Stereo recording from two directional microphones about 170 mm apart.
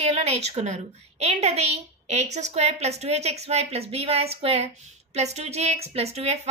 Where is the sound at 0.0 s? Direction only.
40° right (ahead or behind).